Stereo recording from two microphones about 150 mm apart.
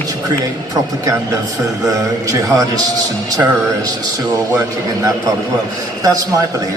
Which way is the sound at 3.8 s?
25° right (ahead or behind).